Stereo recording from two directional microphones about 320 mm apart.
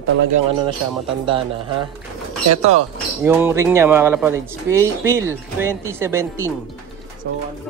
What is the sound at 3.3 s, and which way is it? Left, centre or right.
Speech, centre.